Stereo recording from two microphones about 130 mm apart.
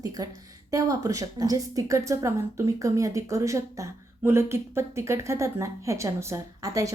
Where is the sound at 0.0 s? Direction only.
25° right (ahead or behind).